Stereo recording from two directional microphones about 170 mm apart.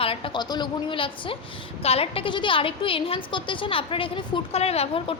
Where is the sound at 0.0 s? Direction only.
30° left (ahead or behind).